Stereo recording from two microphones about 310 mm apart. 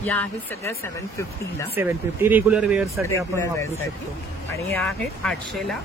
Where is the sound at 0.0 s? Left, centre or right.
Centre.